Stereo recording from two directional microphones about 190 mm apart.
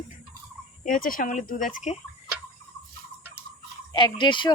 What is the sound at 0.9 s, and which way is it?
Speech, 45° left (ahead or behind).